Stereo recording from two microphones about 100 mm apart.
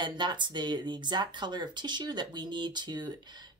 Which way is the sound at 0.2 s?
50° right (ahead or behind).